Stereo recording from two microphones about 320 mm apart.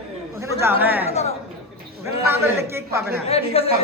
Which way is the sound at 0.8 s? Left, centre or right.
Centre.